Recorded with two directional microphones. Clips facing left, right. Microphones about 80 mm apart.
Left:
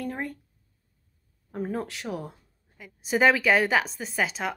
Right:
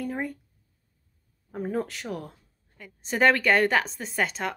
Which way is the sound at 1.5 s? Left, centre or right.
Centre.